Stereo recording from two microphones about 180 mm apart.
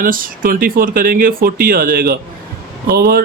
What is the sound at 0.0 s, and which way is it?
Speech, 50° right (ahead or behind).